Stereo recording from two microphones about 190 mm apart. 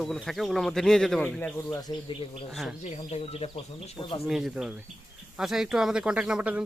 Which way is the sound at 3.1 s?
30° left (ahead or behind).